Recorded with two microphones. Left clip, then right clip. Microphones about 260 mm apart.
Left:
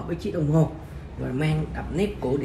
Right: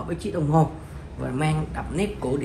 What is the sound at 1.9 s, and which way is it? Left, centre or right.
Speech, right.